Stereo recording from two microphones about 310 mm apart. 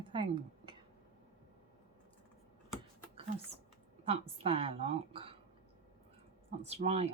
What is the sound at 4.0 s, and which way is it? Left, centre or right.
A woman's voice, centre.